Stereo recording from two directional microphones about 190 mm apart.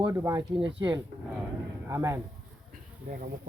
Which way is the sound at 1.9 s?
15° right (ahead or behind).